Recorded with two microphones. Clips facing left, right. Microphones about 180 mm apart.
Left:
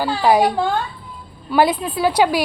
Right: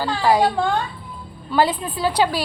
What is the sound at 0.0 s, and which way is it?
A woman's voice, 15° left (ahead or behind).